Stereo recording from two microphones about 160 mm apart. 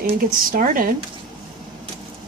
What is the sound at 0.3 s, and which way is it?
Speech, 60° right (ahead or behind).